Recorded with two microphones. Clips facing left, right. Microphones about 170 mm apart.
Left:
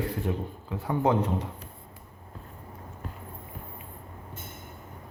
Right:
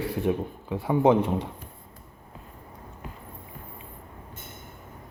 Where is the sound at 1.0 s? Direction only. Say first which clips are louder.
Right 5 dB; 20° right (ahead or behind).